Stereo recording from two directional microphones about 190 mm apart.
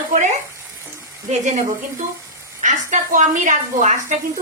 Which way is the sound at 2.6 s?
40° right (ahead or behind).